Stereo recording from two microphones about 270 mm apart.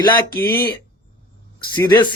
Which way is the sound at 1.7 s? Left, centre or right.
Centre.